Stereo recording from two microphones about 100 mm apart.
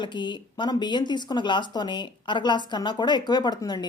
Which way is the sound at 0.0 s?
50° left (ahead or behind).